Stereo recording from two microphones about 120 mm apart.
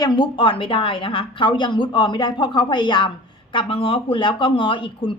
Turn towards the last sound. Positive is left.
turn(degrees=45)  # may be behind; listen again after turning